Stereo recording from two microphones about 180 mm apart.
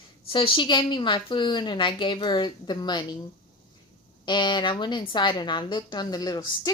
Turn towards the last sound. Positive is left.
turn(degrees=20)  # may be behind; listen again after turning